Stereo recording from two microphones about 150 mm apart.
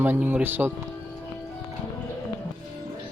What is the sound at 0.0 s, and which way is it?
Speech, 10° right (ahead or behind).